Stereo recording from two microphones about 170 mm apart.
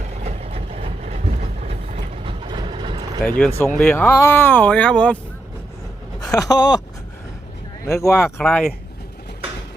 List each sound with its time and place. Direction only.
0.2 s vehicle: 40° right (ahead or behind)
2.2 s vehicle: 30° right (ahead or behind)
3.2 s speech: 10° left (ahead or behind)
6.1 s speech: 20° left (ahead or behind)
7.9 s speech: 15° left (ahead or behind)
8.2 s speech: 5° left (ahead or behind)